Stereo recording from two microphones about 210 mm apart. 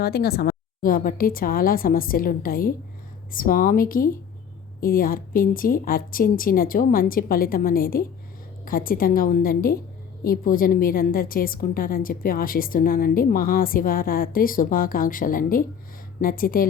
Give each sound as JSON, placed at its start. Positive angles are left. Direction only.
{"t": 0.0, "sound": "a woman's voice", "side_deg": 50}